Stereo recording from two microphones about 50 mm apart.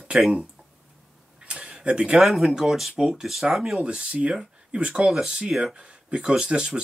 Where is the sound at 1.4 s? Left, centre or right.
Centre.